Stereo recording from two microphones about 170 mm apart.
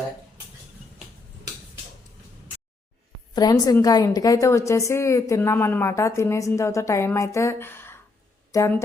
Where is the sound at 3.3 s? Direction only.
20° left (ahead or behind).